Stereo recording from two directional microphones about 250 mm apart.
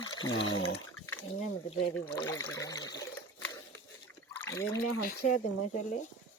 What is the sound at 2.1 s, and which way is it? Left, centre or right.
Speech, centre.